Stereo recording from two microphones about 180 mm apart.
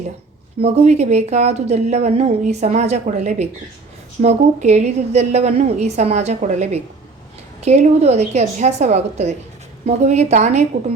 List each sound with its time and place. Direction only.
0.6 s speech: 40° right (ahead or behind)